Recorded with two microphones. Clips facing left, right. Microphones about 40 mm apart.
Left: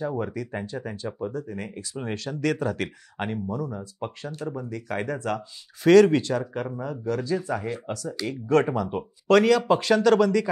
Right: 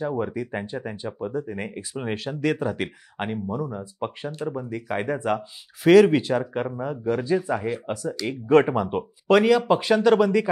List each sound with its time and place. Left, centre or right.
0.0 s speech: centre